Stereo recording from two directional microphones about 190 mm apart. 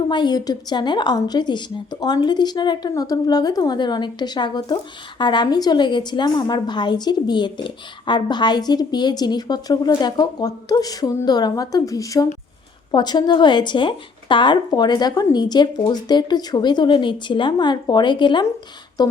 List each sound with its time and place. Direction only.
0.1 s a woman's voice: 25° left (ahead or behind)